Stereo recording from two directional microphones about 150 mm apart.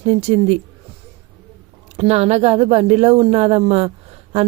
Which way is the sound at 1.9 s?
45° right (ahead or behind).